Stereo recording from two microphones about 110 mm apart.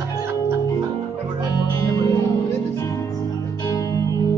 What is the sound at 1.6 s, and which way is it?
Music, 35° left (ahead or behind).